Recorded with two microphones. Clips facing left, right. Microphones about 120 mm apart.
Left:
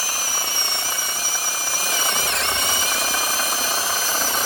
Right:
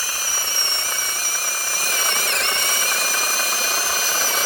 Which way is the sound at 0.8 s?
30° left (ahead or behind).